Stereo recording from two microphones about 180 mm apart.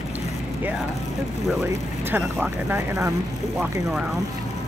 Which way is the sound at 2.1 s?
10° right (ahead or behind).